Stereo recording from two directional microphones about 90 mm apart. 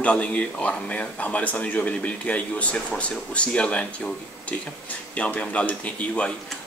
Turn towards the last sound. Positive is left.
turn(degrees=15)  # may be behind; listen again after turning